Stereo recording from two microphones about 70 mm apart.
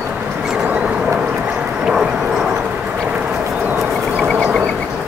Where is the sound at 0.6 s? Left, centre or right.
Right.